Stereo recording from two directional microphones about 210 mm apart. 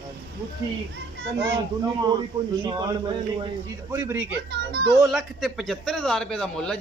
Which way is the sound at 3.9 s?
10° right (ahead or behind).